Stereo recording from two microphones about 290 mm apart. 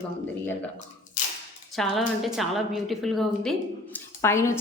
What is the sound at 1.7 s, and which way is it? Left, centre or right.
A woman's voice, centre.